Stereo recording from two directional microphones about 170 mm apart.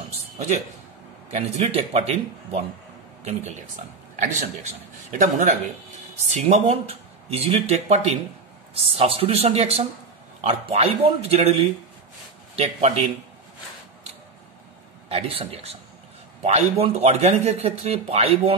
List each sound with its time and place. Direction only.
1.3 s speech: 35° right (ahead or behind)
15.0 s speech: 35° right (ahead or behind)